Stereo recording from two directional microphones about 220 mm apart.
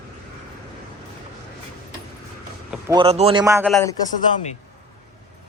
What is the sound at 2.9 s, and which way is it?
Speech, 25° right (ahead or behind).